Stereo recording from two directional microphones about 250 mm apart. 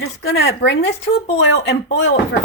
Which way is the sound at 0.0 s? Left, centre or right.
Left.